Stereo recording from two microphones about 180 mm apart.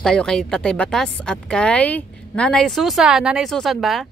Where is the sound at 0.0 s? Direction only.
5° left (ahead or behind).